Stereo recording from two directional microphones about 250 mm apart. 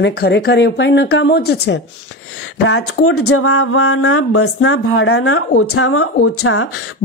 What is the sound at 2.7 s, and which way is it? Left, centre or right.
Speech, left.